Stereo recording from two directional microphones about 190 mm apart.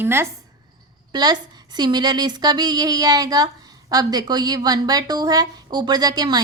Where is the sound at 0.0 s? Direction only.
10° right (ahead or behind).